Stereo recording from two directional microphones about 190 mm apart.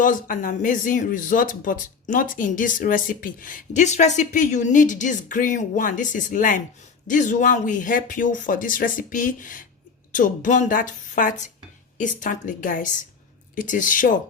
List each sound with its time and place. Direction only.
0.0 s speech: 45° left (ahead or behind)